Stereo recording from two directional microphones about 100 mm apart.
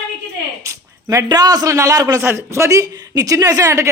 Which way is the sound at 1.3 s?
40° right (ahead or behind).